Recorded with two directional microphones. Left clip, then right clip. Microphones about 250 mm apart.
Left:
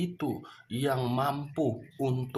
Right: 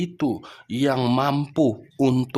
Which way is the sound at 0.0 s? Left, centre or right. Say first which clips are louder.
Right 8 dB; right.